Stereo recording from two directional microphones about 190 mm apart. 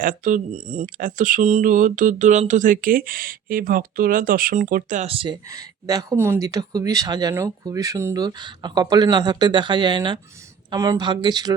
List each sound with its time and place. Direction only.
0.0 s speech: 45° right (ahead or behind); by 11.5 s 20° right (ahead or behind)